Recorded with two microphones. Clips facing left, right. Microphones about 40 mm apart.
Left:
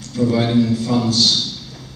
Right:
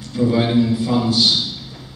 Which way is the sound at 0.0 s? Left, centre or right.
Centre.